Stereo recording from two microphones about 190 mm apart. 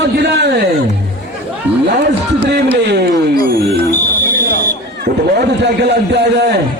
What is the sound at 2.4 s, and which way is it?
Speech, 60° right (ahead or behind).